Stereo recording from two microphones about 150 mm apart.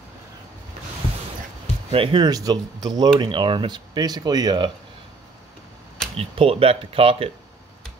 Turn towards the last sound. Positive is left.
turn(degrees=-40)  # may be behind; listen again after turning